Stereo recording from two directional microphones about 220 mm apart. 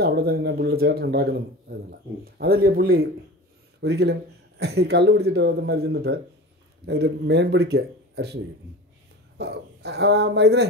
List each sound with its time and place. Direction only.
0.0 s speech: 45° right (ahead or behind)
9.4 s speech: 50° right (ahead or behind)